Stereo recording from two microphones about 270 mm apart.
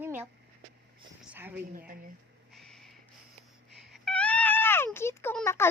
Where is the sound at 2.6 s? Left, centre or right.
Centre.